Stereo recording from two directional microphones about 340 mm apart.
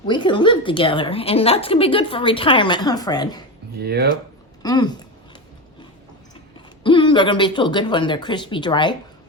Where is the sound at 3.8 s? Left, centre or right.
Right.